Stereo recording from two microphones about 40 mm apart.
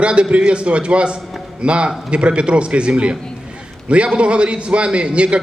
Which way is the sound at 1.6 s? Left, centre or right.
Right.